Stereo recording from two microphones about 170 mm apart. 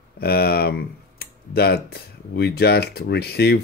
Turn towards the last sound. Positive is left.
turn(degrees=70)  # may be behind; listen again after turning